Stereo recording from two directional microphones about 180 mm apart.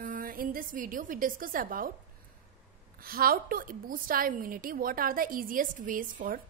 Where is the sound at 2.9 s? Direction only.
55° right (ahead or behind).